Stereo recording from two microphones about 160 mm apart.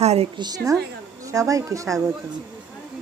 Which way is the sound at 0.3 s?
25° right (ahead or behind).